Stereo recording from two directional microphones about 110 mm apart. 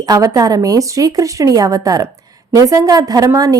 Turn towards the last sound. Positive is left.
turn(degrees=-30)  # may be behind; listen again after turning